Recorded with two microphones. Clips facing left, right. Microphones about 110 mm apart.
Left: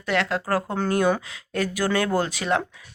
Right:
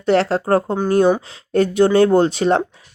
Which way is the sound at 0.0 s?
35° right (ahead or behind).